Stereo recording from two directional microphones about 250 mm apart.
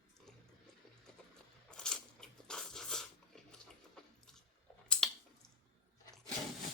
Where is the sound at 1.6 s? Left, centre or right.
Centre.